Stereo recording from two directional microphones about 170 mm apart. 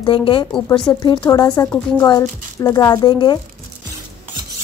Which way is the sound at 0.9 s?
15° left (ahead or behind).